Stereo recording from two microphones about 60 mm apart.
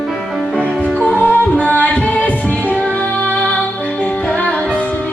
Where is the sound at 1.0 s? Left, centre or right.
Left.